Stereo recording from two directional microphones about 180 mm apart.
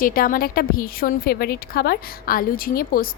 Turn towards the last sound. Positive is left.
turn(degrees=55)  # may be behind; listen again after turning